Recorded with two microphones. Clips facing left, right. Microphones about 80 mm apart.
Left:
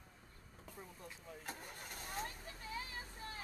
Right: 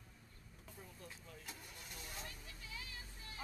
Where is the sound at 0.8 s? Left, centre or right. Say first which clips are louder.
Left 2 dB; left.